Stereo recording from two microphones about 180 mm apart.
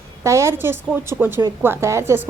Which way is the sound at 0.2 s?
15° right (ahead or behind).